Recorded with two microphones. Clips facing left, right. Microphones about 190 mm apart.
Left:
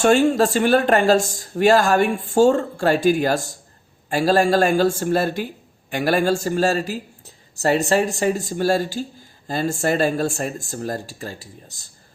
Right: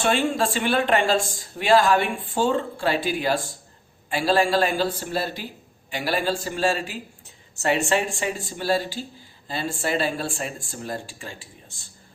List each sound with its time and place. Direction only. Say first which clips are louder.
0.0 s speech: left 7 dB; 45° left (ahead or behind)